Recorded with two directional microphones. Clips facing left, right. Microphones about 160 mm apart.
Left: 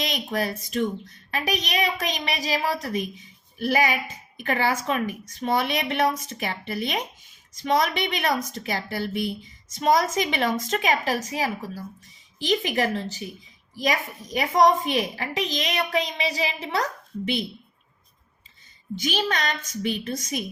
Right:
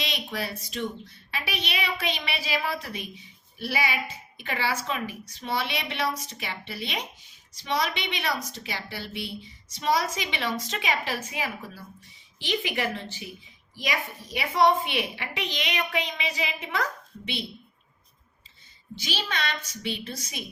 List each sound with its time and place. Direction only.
0.0 s a woman's voice: 45° left (ahead or behind)
19.1 s a woman's voice: 45° left (ahead or behind)